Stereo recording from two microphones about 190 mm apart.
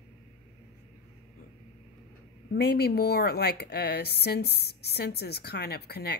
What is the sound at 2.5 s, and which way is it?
Speech, 55° left (ahead or behind).